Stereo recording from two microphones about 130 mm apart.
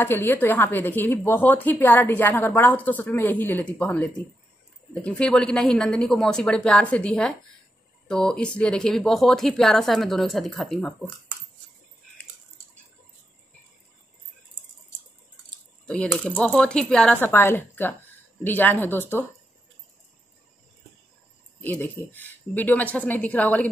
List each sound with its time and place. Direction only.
0.0 s a woman's voice: 15° left (ahead or behind)
15.9 s a woman's voice: 10° left (ahead or behind)
21.5 s a woman's voice: 15° left (ahead or behind)